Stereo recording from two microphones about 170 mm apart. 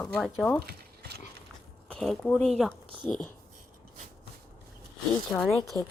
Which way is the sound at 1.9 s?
Centre (ahead or behind).